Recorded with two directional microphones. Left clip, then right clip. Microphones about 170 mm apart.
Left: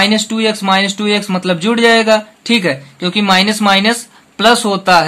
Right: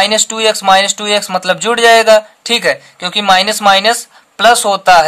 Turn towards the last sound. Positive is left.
turn(degrees=-45)  # may be behind; listen again after turning